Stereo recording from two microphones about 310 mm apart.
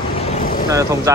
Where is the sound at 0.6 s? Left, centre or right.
Centre.